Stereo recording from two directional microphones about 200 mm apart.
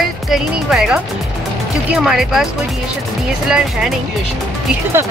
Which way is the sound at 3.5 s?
5° right (ahead or behind).